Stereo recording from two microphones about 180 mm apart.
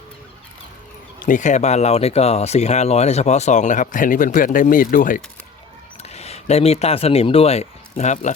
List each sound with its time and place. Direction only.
1.2 s speech: 45° left (ahead or behind)
6.0 s speech: 35° left (ahead or behind)